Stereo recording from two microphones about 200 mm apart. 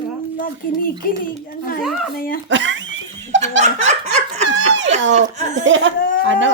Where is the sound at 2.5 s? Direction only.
70° right (ahead or behind).